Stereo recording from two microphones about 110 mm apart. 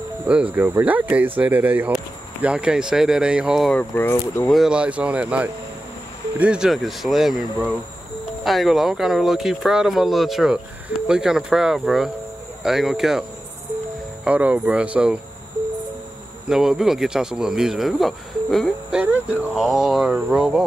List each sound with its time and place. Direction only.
0.3 s speech: 10° right (ahead or behind)
3.7 s speech: 20° left (ahead or behind)
4.5 s speech: 5° right (ahead or behind)
14.2 s speech: 10° right (ahead or behind)
16.4 s speech: 5° right (ahead or behind)